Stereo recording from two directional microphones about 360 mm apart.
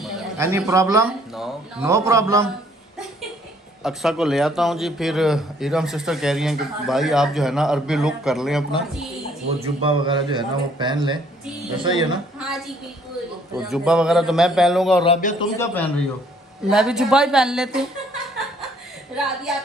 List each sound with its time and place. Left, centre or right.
0.0 s a man's voice: centre
3.8 s a man's voice: centre
9.6 s a man's voice: centre
12.4 s a man's voice: centre
15.0 s a man's voice: centre
15.5 s a man's voice: centre
19.5 s a man's voice: centre